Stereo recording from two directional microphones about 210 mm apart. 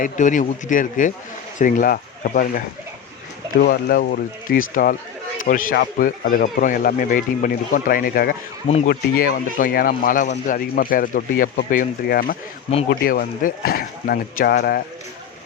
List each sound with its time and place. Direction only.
0.0 s speech: 35° left (ahead or behind)